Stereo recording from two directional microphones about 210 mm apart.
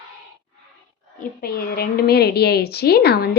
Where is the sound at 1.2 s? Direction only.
45° left (ahead or behind).